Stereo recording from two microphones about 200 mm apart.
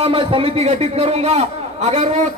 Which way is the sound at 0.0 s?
25° right (ahead or behind).